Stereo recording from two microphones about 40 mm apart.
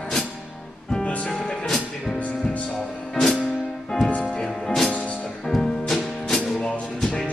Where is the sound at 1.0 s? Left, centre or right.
Left.